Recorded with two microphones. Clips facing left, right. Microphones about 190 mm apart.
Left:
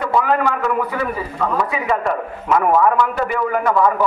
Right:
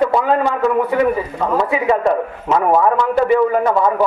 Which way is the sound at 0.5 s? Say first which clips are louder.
Right 4 dB; 25° right (ahead or behind).